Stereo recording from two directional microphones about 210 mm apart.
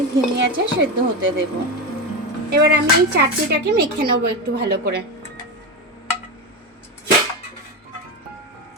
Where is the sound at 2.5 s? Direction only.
50° right (ahead or behind).